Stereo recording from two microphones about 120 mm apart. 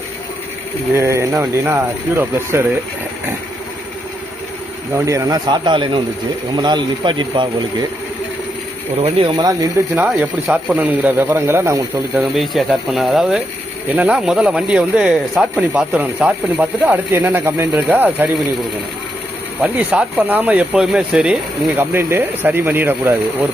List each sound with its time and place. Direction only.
0.9 s speech: 25° right (ahead or behind)
4.9 s speech: 25° right (ahead or behind); by 7.4 s 40° right (ahead or behind)
9.0 s speech: 55° right (ahead or behind)
9.3 s speech: 35° right (ahead or behind)
9.9 s speech: 15° right (ahead or behind)
12.4 s speech: centre (ahead or behind); by 18.3 s 15° right (ahead or behind)
19.7 s speech: 10° right (ahead or behind)
21.8 s speech: 20° right (ahead or behind)